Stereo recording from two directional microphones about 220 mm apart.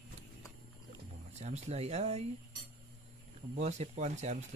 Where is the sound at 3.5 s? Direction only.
30° right (ahead or behind).